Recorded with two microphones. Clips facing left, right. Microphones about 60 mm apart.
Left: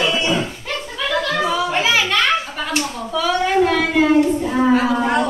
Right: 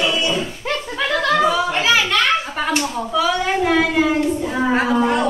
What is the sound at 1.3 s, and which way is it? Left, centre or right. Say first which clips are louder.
Children playing: right 7 dB; centre.